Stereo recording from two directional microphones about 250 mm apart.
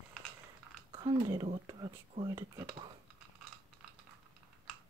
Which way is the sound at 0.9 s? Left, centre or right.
Centre.